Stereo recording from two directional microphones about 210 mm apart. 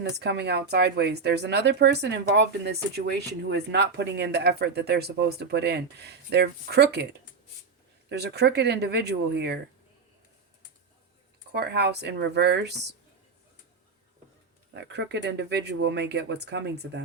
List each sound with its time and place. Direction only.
0.0 s speech: 50° right (ahead or behind)
8.1 s speech: 50° right (ahead or behind)
11.5 s speech: 50° right (ahead or behind)
14.7 s speech: 55° right (ahead or behind)